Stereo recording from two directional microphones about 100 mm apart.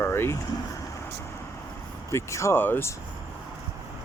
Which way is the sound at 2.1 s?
30° left (ahead or behind).